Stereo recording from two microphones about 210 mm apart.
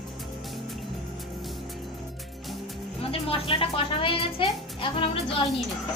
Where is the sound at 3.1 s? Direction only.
25° left (ahead or behind).